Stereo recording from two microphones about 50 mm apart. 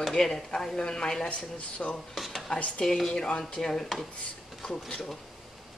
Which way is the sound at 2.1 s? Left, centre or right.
Centre.